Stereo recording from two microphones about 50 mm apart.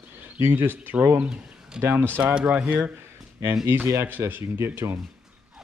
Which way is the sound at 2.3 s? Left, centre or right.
Right.